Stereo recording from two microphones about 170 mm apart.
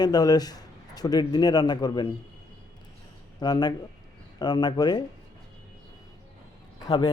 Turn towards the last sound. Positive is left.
turn(degrees=25)  # may be behind; listen again after turning